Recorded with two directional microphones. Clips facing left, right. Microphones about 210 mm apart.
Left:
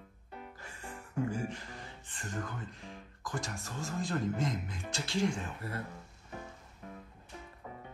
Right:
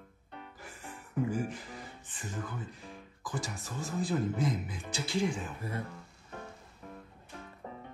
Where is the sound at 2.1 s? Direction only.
5° right (ahead or behind).